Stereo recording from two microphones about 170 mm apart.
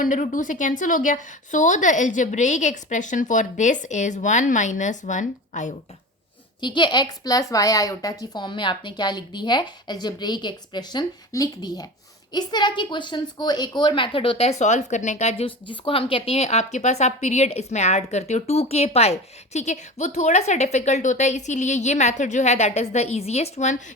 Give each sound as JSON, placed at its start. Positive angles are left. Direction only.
{"t": 0.0, "sound": "a woman's voice", "side_deg": 50}
{"t": 6.6, "sound": "a woman's voice", "side_deg": 25}